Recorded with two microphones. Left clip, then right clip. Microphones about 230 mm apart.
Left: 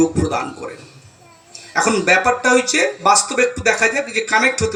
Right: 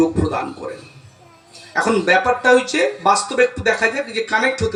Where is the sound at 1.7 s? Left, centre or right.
Left.